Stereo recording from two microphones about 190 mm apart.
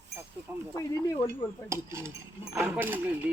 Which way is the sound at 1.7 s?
15° right (ahead or behind).